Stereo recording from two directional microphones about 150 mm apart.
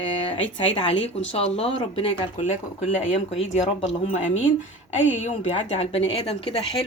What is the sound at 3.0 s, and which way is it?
A woman's voice, 50° left (ahead or behind).